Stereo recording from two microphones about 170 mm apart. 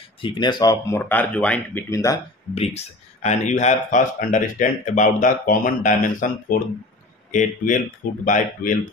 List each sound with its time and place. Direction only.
0.2 s speech: 30° left (ahead or behind)
2.5 s speech: 40° left (ahead or behind); by 8.8 s 55° left (ahead or behind)